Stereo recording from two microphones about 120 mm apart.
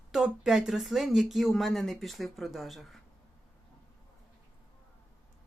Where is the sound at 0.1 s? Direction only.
5° right (ahead or behind).